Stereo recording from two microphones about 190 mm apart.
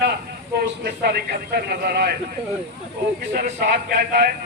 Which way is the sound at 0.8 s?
60° right (ahead or behind).